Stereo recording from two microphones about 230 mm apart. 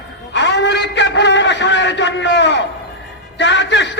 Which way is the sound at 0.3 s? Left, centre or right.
Left.